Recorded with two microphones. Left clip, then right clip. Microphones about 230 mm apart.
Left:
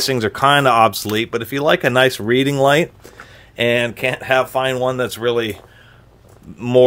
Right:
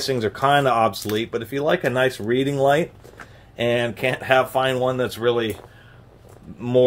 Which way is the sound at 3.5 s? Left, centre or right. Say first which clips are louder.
Left 5 dB; left.